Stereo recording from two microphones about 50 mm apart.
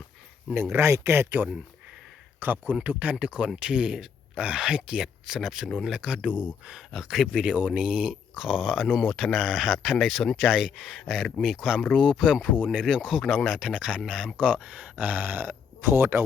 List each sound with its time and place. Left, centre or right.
0.5 s speech: right
1.3 s speech: right; by 14.3 s centre
14.3 s speech: right